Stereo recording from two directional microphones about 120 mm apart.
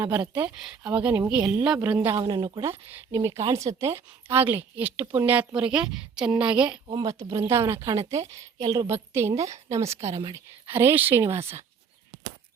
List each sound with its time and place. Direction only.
0.4 s speech: 10° right (ahead or behind)
2.2 s speech: 35° right (ahead or behind)
2.6 s a woman's voice: 20° right (ahead or behind)
6.8 s a woman's voice: 35° right (ahead or behind)
8.9 s a woman's voice: 20° right (ahead or behind)